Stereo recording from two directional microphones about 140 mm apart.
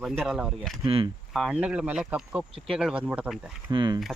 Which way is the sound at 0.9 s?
40° right (ahead or behind).